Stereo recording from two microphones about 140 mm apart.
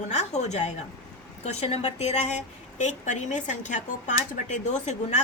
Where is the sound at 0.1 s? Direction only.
55° left (ahead or behind).